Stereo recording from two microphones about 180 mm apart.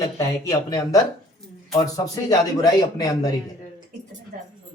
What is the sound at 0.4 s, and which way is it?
Speech, 20° left (ahead or behind).